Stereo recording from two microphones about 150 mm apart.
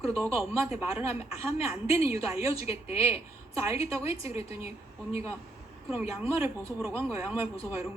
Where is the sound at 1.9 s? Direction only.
20° right (ahead or behind).